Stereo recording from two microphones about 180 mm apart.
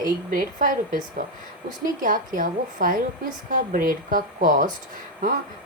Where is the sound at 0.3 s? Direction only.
50° right (ahead or behind).